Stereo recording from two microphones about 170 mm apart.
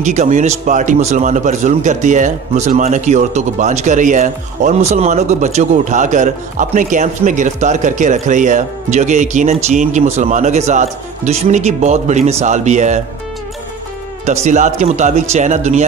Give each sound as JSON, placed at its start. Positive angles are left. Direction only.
{"t": 0.0, "sound": "a man's voice", "side_deg": -45}
{"t": 14.2, "sound": "a man's voice", "side_deg": -45}